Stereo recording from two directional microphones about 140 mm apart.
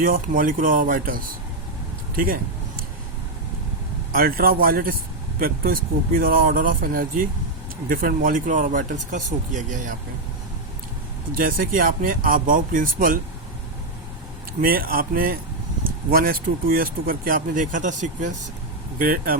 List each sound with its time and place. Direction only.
0.0 s speech: 85° right
2.1 s a sound: 90° right
4.1 s speech: 90° right; by 9.9 s 65° right (ahead or behind)
11.3 s speech: 90° right
14.6 s speech: 90° right; by 18.3 s 65° right (ahead or behind)
18.9 s speech: 90° right